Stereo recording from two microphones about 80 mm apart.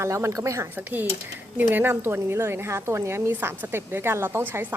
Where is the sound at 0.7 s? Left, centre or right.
Right.